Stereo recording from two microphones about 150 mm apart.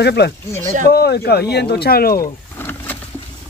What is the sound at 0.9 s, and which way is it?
Speech, 90° left.